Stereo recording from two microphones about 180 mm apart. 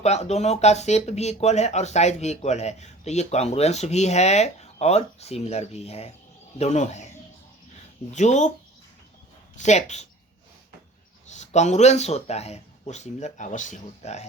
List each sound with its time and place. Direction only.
0.0 s speech: 40° left (ahead or behind)
8.1 s speech: 40° left (ahead or behind)
9.6 s speech: 40° left (ahead or behind)
11.3 s speech: 40° left (ahead or behind)